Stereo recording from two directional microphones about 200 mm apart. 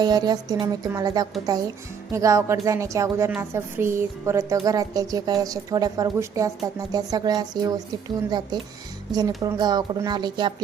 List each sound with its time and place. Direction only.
0.0 s a woman's voice: 20° right (ahead or behind)